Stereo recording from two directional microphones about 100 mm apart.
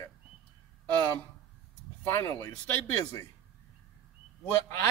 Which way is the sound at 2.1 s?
30° left (ahead or behind).